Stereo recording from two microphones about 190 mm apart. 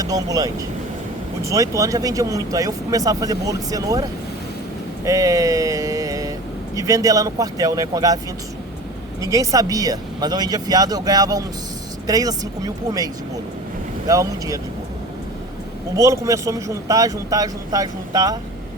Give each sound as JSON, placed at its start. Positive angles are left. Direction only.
{"t": 0.0, "sound": "speech", "side_deg": -20}
{"t": 9.2, "sound": "speech", "side_deg": -15}
{"t": 14.1, "sound": "speech", "side_deg": -20}
{"t": 16.0, "sound": "speech", "side_deg": -15}